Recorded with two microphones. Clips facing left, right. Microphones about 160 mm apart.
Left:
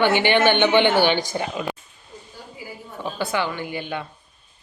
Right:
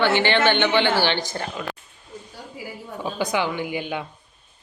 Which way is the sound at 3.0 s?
15° right (ahead or behind).